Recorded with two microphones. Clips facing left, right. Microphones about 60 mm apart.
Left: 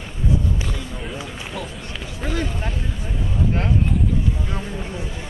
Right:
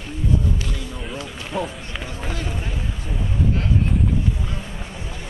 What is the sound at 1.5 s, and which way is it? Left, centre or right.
Run, right.